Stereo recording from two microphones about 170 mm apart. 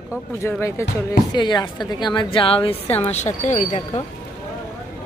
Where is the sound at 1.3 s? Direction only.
25° left (ahead or behind).